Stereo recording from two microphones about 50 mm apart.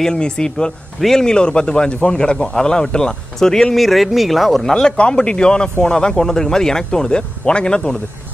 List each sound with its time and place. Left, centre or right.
0.0 s a man's voice: centre
3.7 s a man's voice: centre